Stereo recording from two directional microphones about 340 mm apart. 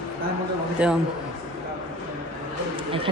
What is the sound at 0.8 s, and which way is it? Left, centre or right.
Speech, centre.